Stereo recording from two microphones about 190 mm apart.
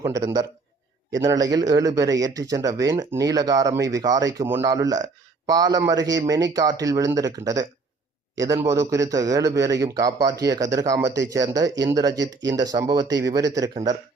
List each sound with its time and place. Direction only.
0.0 s a man's voice: 20° right (ahead or behind)